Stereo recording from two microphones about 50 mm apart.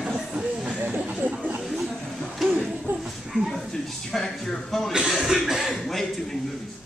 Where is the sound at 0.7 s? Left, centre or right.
Right.